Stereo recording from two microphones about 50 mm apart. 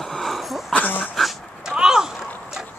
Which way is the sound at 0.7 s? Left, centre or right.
Left.